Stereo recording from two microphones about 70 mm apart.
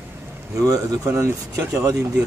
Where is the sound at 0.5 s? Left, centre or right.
Right.